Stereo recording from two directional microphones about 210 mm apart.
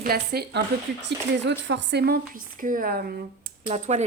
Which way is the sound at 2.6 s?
40° right (ahead or behind).